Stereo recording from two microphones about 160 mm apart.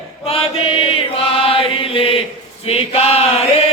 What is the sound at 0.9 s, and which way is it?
Chant, 35° left (ahead or behind).